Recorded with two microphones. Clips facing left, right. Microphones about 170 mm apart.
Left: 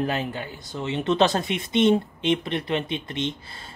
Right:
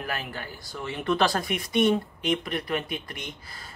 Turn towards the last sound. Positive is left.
turn(degrees=25)  # may be behind; listen again after turning